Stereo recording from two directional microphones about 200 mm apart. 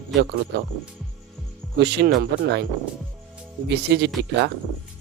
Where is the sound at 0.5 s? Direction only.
60° right (ahead or behind).